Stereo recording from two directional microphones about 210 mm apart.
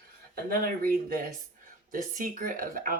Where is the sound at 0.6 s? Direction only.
45° right (ahead or behind).